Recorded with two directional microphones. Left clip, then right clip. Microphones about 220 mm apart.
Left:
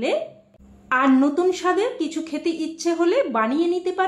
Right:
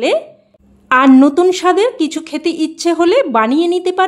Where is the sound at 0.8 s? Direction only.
50° right (ahead or behind).